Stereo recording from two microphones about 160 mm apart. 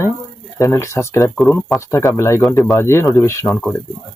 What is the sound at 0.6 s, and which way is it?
Speech, 20° left (ahead or behind).